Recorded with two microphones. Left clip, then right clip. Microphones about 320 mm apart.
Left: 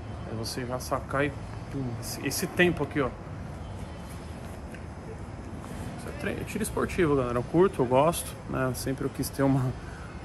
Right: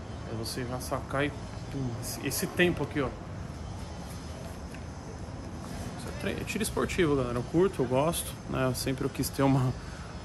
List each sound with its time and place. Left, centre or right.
0.4 s speech: centre
6.3 s speech: centre
9.4 s speech: centre